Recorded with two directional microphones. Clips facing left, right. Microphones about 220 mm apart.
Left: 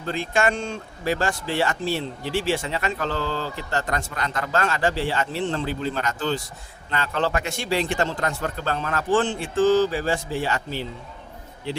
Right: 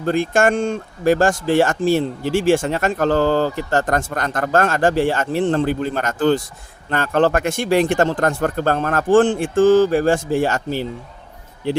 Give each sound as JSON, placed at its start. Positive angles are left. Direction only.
{"t": 0.0, "sound": "speech", "side_deg": -50}